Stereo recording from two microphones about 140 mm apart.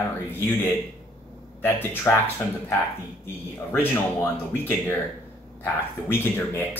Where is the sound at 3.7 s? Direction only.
15° left (ahead or behind).